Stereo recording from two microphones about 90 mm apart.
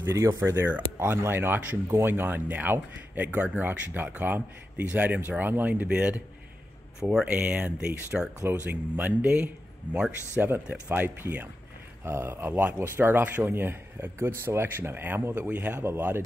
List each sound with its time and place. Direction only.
0.0 s speech: 35° right (ahead or behind)
0.5 s a man's voice: 20° right (ahead or behind)